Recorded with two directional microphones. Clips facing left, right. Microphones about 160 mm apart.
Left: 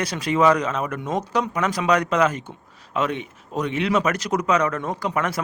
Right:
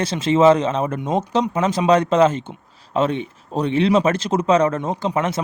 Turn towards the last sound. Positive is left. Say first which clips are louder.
# right 3 dB
turn(degrees=-25)  # may be behind; listen again after turning